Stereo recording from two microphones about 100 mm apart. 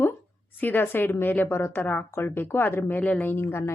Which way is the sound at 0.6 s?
20° left (ahead or behind).